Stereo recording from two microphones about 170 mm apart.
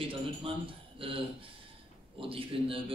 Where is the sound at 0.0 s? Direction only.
30° right (ahead or behind).